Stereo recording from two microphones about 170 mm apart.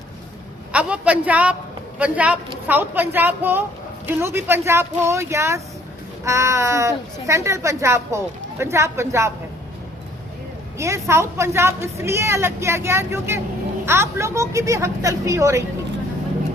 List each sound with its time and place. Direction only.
0.7 s a woman's voice: 5° right (ahead or behind)
10.8 s a woman's voice: 15° right (ahead or behind)